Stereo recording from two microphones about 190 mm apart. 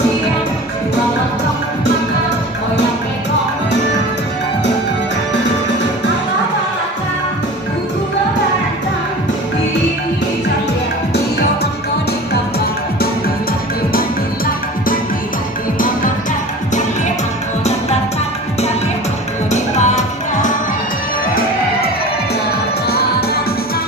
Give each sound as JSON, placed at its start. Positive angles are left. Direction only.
{"t": 11.1, "sound": "music", "side_deg": 55}
{"t": 19.5, "sound": "music", "side_deg": 40}
{"t": 22.9, "sound": "music", "side_deg": 55}